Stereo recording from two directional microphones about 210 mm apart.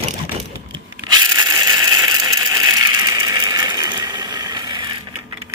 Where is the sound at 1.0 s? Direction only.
20° right (ahead or behind).